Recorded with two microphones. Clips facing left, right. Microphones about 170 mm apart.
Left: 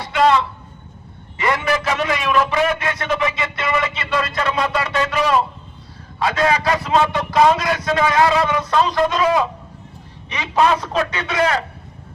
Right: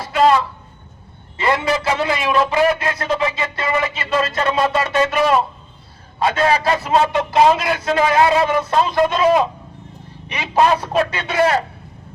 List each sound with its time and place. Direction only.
0.0 s a sound: 30° right (ahead or behind)
1.4 s a man's voice: 30° right (ahead or behind)
10.5 s a man's voice: 30° right (ahead or behind)